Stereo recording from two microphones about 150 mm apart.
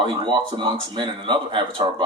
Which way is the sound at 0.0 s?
35° right (ahead or behind).